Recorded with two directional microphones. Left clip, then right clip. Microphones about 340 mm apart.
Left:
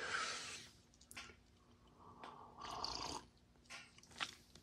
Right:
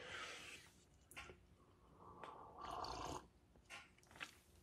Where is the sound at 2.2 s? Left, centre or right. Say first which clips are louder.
Left 1 dB; centre.